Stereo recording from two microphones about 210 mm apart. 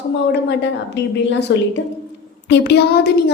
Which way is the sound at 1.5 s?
55° left (ahead or behind).